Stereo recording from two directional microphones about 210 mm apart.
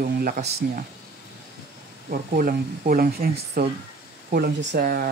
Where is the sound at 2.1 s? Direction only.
40° right (ahead or behind).